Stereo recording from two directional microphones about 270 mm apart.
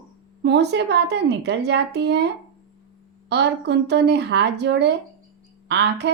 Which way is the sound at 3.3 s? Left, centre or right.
Right.